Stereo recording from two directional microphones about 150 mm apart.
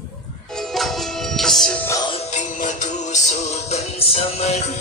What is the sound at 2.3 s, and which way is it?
Music, 55° left (ahead or behind).